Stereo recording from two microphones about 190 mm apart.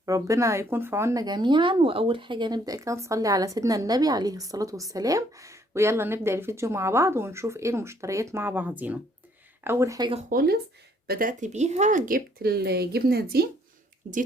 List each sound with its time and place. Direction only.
0.0 s speech: 15° right (ahead or behind)
10.2 s speech: 55° right (ahead or behind)
14.0 s speech: 40° right (ahead or behind)